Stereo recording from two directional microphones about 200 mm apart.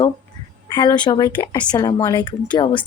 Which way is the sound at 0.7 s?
20° left (ahead or behind).